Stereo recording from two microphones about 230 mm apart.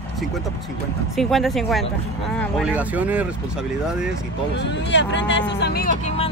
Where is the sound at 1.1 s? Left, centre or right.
Centre.